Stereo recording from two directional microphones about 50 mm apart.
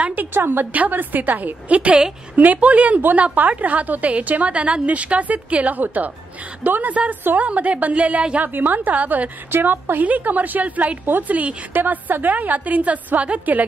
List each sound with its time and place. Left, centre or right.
0.1 s a woman's voice: right
8.4 s a woman's voice: right
9.5 s a woman's voice: right